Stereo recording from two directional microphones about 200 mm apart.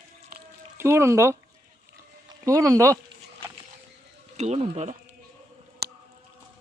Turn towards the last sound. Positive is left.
turn(degrees=-55)  # may be behind; listen again after turning